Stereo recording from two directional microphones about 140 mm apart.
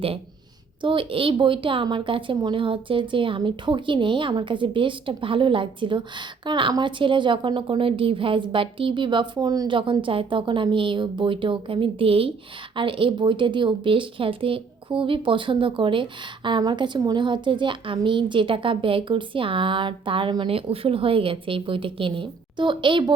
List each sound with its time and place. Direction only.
0.8 s a woman's voice: 40° right (ahead or behind)